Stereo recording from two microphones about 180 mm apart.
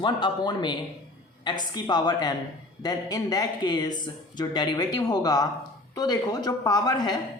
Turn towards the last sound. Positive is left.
turn(degrees=20)  # may be behind; listen again after turning